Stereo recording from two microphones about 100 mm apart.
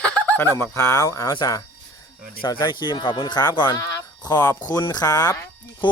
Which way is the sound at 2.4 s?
50° left (ahead or behind).